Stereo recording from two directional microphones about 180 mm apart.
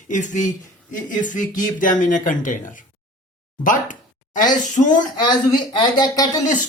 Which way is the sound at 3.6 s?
45° left (ahead or behind).